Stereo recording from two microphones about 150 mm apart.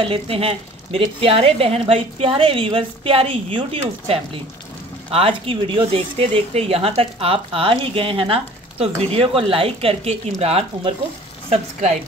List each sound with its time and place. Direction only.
0.0 s speech: 40° right (ahead or behind)
11.5 s a woman's voice: 50° right (ahead or behind)